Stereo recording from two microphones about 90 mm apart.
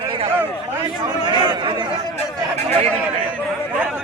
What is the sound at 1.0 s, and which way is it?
Speech, 55° right (ahead or behind).